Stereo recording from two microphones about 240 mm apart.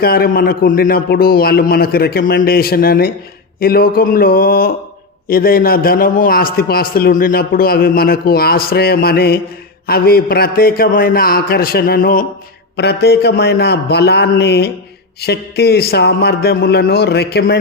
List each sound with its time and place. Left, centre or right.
0.0 s a man's voice: left